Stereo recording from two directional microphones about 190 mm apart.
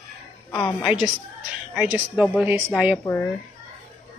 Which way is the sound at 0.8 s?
5° right (ahead or behind).